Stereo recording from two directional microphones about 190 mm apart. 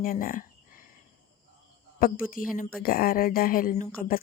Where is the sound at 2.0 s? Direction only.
45° left (ahead or behind).